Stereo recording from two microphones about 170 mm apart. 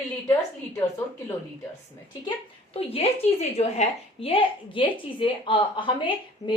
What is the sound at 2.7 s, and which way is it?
A woman's voice, 35° left (ahead or behind).